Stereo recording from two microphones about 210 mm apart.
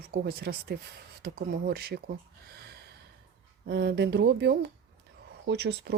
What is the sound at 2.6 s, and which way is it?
Gasp, 50° right (ahead or behind).